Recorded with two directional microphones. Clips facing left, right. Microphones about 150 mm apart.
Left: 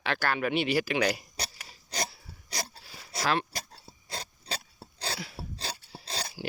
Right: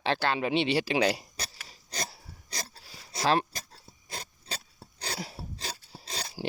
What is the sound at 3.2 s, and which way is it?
Speech, 30° right (ahead or behind).